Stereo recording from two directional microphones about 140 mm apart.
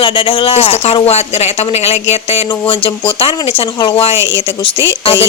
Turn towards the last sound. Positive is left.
turn(degrees=40)  # may be behind; listen again after turning